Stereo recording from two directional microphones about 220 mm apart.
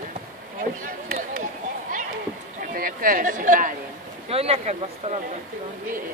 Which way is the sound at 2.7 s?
40° right (ahead or behind).